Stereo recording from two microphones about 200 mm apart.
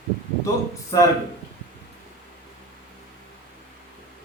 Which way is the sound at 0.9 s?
20° left (ahead or behind).